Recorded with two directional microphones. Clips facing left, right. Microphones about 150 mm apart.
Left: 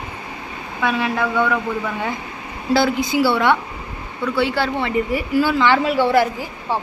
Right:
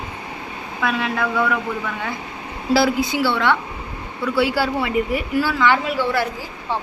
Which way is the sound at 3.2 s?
10° left (ahead or behind).